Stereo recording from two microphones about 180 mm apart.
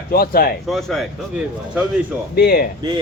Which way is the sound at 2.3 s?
60° left (ahead or behind).